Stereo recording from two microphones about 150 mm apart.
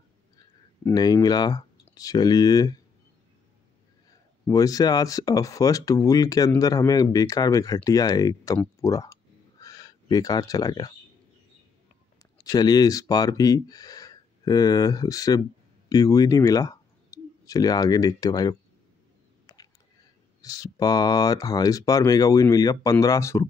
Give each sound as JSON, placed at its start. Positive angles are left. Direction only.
{"t": 0.8, "sound": "speech", "side_deg": 25}
{"t": 4.5, "sound": "speech", "side_deg": 25}
{"t": 8.8, "sound": "a sound", "side_deg": 20}
{"t": 12.2, "sound": "speech", "side_deg": 25}
{"t": 19.4, "sound": "a sound", "side_deg": 25}
{"t": 20.4, "sound": "speech", "side_deg": 25}